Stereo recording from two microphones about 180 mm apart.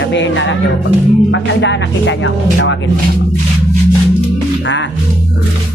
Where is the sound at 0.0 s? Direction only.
85° left.